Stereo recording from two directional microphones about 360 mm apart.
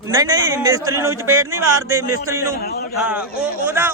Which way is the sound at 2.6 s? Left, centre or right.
Left.